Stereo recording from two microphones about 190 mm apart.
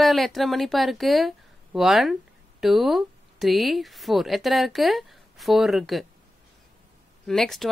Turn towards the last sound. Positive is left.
turn(degrees=0)  # may be behind; listen again after turning